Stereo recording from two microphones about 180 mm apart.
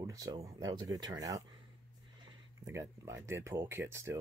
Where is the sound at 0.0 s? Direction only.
20° right (ahead or behind).